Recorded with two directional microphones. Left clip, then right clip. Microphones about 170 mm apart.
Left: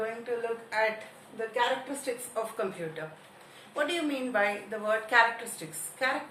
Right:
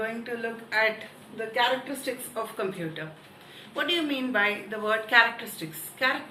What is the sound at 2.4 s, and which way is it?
Speech, 25° left (ahead or behind).